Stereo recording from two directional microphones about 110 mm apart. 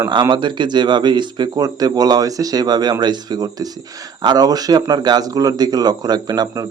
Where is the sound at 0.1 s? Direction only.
40° right (ahead or behind).